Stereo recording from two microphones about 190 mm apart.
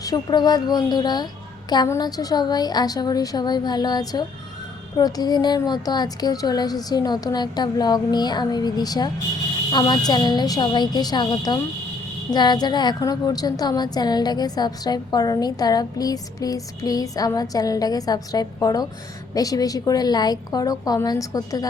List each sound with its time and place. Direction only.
0.0 s a woman's voice: 20° left (ahead or behind)